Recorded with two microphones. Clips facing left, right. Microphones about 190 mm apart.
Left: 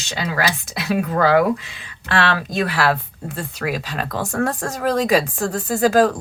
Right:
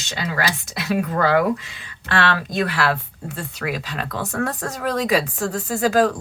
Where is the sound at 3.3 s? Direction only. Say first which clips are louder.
Left 2 dB; 45° left (ahead or behind).